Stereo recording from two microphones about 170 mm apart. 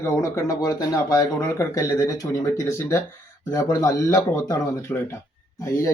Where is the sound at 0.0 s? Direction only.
15° left (ahead or behind).